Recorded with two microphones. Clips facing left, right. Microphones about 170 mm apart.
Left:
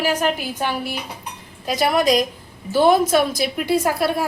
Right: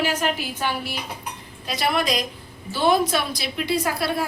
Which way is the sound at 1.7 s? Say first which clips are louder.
Left 6 dB; 45° left (ahead or behind).